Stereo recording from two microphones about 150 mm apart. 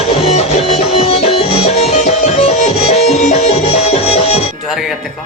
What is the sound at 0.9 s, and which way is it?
Music, 40° left (ahead or behind).